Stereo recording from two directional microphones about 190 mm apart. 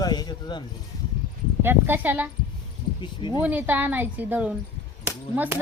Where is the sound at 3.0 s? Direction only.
25° left (ahead or behind).